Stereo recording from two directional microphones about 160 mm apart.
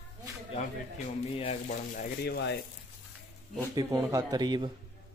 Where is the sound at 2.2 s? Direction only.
90° left.